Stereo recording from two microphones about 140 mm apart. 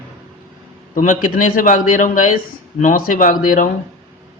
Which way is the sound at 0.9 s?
70° left (ahead or behind).